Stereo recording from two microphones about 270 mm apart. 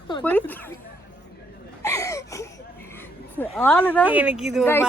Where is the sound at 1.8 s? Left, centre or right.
Centre.